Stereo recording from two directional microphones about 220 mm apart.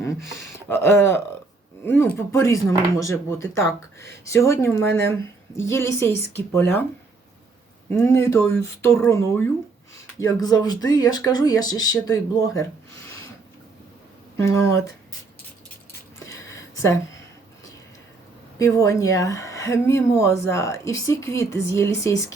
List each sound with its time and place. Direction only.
0.7 s speech: 10° left (ahead or behind)
7.9 s speech: 10° left (ahead or behind)
14.4 s speech: 15° left (ahead or behind)
16.2 s a sound: 15° left (ahead or behind)
18.6 s speech: 15° left (ahead or behind)